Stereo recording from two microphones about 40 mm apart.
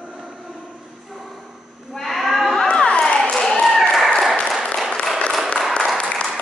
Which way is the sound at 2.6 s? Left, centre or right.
Left.